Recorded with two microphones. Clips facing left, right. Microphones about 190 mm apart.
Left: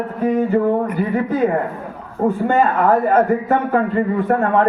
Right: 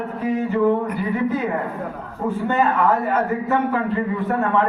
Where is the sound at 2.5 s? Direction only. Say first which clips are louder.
Left 2 dB; 40° left (ahead or behind).